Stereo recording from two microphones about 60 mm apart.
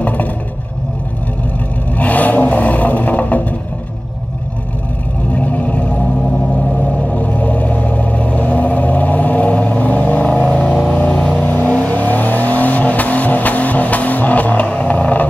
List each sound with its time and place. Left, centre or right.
0.0 s vehicle: left
2.0 s vehicle: left
5.3 s vehicle: left
7.1 s vehicle: left
11.4 s vehicle: left